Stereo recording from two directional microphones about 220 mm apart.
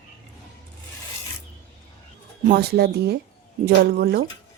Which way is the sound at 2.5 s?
45° right (ahead or behind).